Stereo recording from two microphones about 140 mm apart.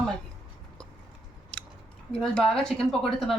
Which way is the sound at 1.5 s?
10° left (ahead or behind).